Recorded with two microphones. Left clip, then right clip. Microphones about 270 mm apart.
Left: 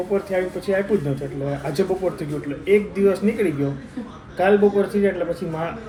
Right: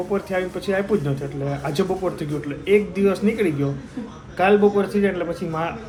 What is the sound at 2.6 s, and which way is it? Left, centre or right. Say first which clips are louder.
Speech: left 1 dB; centre.